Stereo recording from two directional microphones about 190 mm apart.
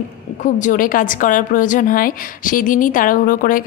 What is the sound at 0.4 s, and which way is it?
A woman's voice, 40° left (ahead or behind).